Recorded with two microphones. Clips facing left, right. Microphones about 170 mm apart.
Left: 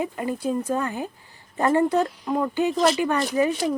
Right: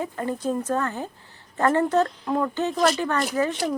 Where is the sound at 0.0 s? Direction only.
10° left (ahead or behind).